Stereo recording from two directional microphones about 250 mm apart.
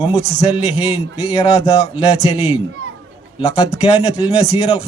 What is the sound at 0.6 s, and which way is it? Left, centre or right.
A man's voice, left.